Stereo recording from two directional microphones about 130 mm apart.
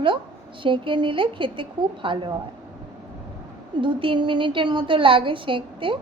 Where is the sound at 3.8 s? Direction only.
40° right (ahead or behind).